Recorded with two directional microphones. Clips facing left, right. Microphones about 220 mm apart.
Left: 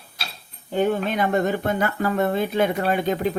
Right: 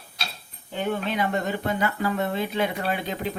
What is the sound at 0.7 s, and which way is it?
Speech, 45° left (ahead or behind).